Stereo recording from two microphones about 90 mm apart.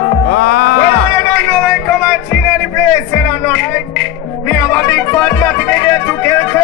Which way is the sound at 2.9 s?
15° left (ahead or behind).